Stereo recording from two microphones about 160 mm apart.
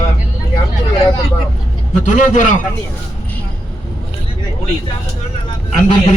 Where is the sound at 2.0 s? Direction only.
50° left (ahead or behind).